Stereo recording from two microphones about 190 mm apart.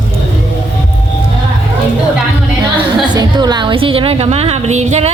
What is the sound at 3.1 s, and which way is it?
A woman's voice, 20° right (ahead or behind).